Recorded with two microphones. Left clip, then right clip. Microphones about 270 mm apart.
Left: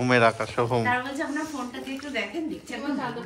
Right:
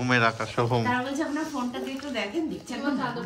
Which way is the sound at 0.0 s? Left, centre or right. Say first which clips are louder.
Left 3 dB; centre.